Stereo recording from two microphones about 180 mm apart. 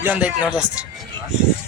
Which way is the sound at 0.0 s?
10° right (ahead or behind).